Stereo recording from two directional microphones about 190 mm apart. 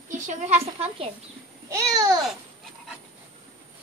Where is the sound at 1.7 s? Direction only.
20° right (ahead or behind).